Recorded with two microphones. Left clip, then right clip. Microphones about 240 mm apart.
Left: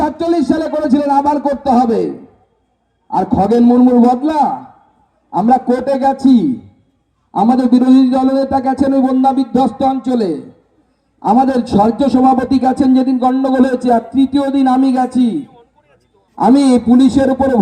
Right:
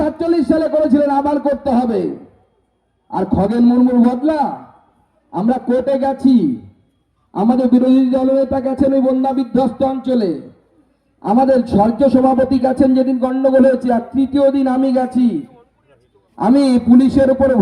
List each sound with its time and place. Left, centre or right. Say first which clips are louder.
0.0 s a man's voice: left 2 dB; left
3.1 s a man's voice: left 5 dB; left
7.3 s a man's voice: left 3 dB; left
16.4 s a man's voice: left 3 dB; left